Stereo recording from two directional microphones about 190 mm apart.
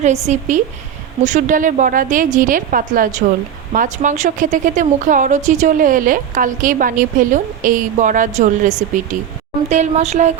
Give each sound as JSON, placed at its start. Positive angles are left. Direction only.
{"t": 0.0, "sound": "a woman's voice", "side_deg": -40}